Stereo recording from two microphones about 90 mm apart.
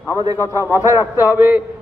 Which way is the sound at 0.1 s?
40° right (ahead or behind).